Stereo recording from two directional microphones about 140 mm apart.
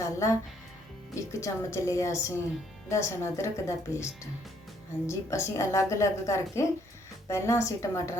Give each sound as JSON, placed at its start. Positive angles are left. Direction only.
{"t": 0.0, "sound": "a woman's voice", "side_deg": 20}